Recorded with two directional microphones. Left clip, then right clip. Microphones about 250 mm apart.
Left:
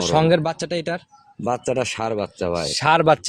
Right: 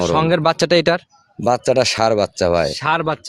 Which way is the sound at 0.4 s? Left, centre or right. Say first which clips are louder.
Right 10 dB; right.